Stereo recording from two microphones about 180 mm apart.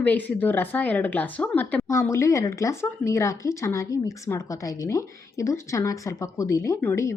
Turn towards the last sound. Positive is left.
turn(degrees=15)  # may be behind; listen again after turning